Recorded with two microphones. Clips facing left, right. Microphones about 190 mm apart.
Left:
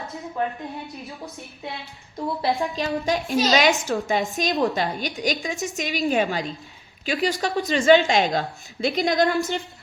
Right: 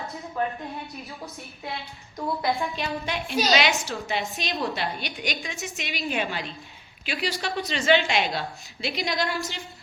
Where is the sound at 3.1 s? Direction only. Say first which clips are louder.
Left 3 dB; 40° left (ahead or behind).